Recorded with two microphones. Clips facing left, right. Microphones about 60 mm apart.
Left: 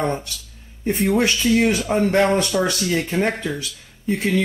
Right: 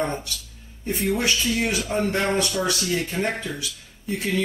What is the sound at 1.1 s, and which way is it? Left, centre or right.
Speech, left.